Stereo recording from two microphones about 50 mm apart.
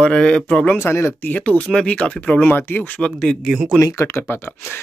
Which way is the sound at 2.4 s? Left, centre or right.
Left.